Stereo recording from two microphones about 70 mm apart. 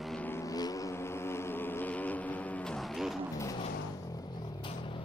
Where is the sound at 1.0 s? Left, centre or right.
Left.